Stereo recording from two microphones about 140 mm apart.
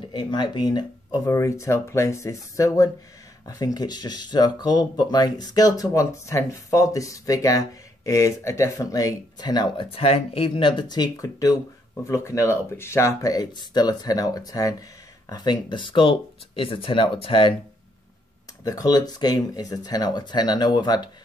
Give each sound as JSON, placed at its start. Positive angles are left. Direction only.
{"t": 0.1, "sound": "speech", "side_deg": 35}
{"t": 9.8, "sound": "speech", "side_deg": 45}
{"t": 10.8, "sound": "speech", "side_deg": 30}
{"t": 18.6, "sound": "speech", "side_deg": 25}